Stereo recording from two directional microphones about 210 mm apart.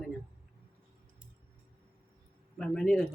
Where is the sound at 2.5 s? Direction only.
5° left (ahead or behind).